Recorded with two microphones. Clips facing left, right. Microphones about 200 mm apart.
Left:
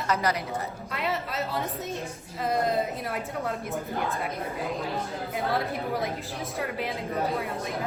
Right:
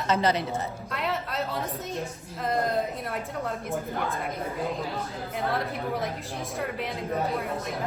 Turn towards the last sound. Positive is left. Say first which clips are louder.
# even
turn(degrees=0)  # may be behind; listen again after turning